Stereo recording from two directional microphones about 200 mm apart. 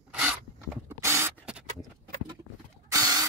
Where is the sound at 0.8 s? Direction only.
10° right (ahead or behind).